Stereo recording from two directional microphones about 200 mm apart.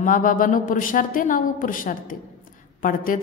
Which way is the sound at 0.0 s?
40° left (ahead or behind).